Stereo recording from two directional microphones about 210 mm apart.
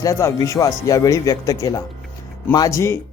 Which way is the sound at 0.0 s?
15° left (ahead or behind).